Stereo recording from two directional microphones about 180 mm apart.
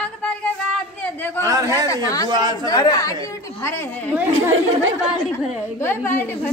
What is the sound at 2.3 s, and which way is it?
Speech, 25° right (ahead or behind).